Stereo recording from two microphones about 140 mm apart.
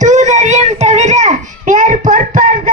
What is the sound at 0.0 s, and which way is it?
Children playing, 60° right (ahead or behind).